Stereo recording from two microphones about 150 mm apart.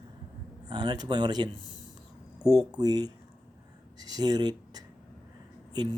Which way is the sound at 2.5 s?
25° right (ahead or behind).